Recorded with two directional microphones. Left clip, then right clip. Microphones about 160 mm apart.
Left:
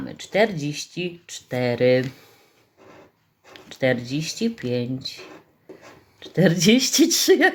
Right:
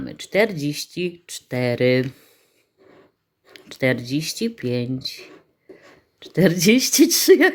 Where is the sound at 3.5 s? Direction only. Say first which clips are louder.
Even; 40° right (ahead or behind).